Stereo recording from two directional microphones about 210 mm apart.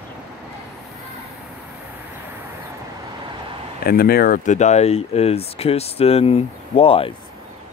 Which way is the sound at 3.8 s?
45° left (ahead or behind).